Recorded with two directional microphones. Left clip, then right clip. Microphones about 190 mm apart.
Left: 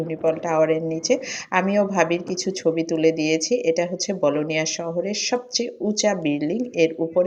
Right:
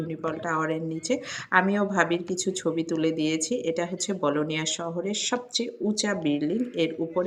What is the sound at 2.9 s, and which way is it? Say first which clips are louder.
Speech: left 7 dB; 35° right (ahead or behind).